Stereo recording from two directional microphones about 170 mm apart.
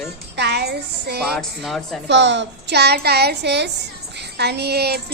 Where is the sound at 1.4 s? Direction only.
Centre (ahead or behind).